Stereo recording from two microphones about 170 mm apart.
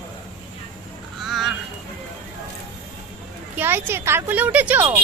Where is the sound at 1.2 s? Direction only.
Centre (ahead or behind).